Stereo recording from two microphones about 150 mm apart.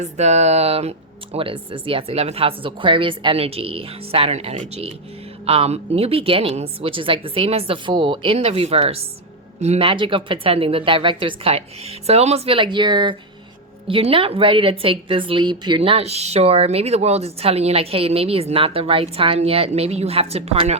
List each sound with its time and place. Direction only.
0.0 s a woman's voice: 50° right (ahead or behind)